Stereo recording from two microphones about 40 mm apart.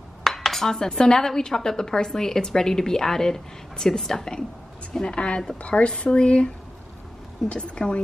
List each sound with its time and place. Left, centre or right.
0.2 s dishes: centre
0.7 s a woman's voice: centre